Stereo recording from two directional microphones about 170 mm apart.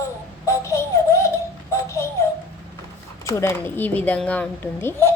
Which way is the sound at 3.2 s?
15° left (ahead or behind).